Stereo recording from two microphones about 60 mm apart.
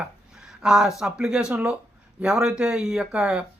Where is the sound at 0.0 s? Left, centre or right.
Centre.